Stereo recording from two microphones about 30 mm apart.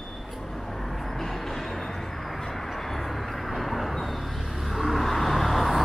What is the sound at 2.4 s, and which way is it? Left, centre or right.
Vehicle, centre.